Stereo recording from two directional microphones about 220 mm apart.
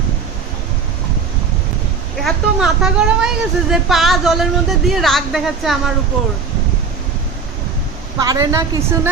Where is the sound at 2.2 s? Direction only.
5° right (ahead or behind).